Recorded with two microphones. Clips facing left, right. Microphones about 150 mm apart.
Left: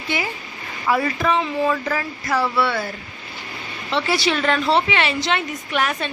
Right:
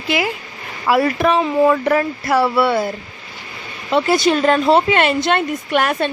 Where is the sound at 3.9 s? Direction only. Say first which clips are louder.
Right 6 dB; 45° right (ahead or behind).